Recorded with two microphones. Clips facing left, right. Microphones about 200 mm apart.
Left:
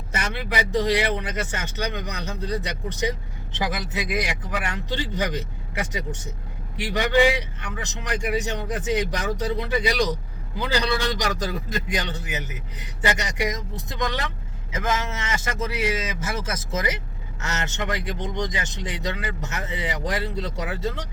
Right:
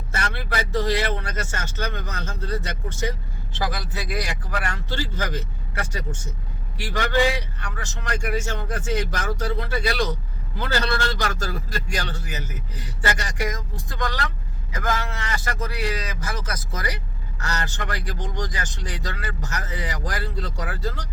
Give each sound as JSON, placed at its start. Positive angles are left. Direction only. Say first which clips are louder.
{"t": 0.1, "sound": "a man's voice", "louder": "left 1 dB", "side_deg": 15}